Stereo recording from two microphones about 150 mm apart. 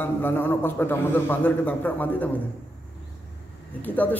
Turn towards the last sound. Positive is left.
turn(degrees=10)  # may be behind; listen again after turning